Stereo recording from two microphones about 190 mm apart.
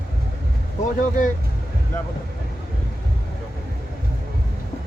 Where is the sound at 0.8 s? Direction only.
45° left (ahead or behind).